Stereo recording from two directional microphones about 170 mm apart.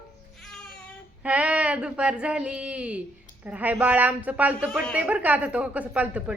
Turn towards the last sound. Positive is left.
turn(degrees=-5)  # may be behind; listen again after turning